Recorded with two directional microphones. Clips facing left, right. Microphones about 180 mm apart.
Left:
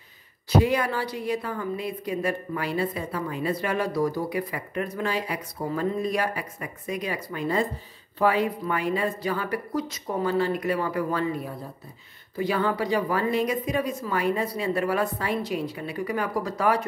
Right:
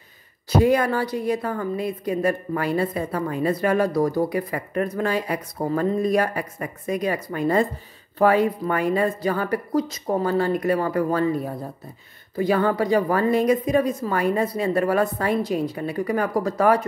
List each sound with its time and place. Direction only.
0.5 s a woman's voice: 45° right (ahead or behind)